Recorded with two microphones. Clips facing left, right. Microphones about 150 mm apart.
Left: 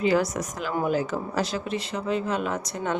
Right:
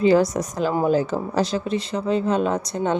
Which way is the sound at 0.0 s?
35° right (ahead or behind).